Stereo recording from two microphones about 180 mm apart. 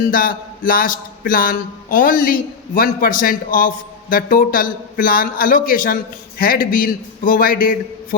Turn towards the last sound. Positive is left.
turn(degrees=50)  # may be behind; listen again after turning